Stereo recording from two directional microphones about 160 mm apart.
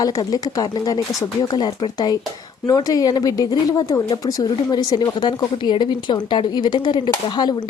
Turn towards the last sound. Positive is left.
turn(degrees=25)  # may be behind; listen again after turning